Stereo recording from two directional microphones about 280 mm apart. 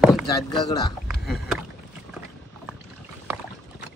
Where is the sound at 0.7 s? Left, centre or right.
Centre.